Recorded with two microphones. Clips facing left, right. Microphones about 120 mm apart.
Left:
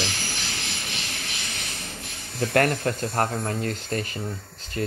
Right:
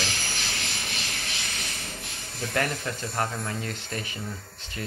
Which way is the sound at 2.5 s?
55° left (ahead or behind).